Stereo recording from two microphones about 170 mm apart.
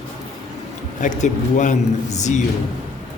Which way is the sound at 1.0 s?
45° left (ahead or behind).